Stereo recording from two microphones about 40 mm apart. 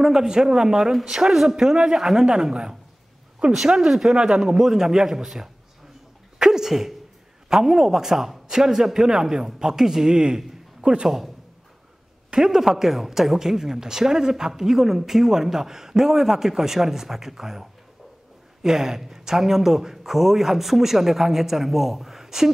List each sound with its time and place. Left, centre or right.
0.0 s speech: centre
6.3 s a sound: centre
7.4 s speech: centre
12.4 s speech: centre